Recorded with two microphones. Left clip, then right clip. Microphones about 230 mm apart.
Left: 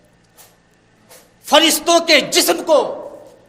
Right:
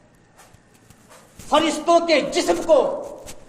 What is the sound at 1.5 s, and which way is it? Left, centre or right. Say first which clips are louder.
A man's voice: left 5 dB; left.